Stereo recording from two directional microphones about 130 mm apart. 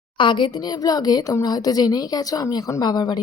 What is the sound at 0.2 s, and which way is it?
A woman's voice, 40° left (ahead or behind).